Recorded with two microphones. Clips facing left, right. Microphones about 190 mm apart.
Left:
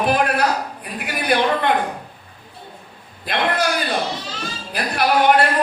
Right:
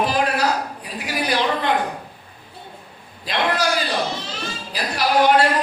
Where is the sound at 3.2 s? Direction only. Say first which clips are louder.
Left 1 dB; 55° left (ahead or behind).